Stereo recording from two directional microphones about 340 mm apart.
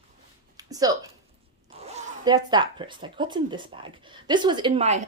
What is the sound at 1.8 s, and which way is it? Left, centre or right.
Speech, centre.